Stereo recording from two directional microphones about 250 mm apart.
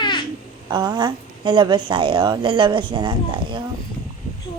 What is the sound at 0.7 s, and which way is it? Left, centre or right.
A woman's voice, centre.